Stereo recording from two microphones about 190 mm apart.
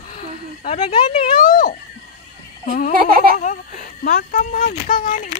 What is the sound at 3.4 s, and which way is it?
Speech, 45° left (ahead or behind).